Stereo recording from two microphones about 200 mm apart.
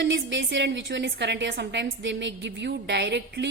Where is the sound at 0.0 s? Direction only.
60° right (ahead or behind).